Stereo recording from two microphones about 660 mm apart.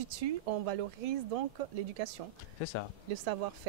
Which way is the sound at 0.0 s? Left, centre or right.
Right.